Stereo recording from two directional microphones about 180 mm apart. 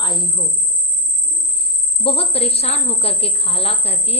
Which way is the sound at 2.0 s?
30° left (ahead or behind).